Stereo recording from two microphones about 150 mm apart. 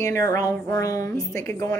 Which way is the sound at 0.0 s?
20° left (ahead or behind).